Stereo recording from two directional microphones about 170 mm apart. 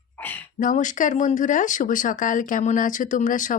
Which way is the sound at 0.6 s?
50° left (ahead or behind).